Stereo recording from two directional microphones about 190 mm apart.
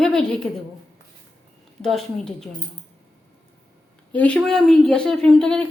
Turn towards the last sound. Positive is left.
turn(degrees=5)  # may be behind; listen again after turning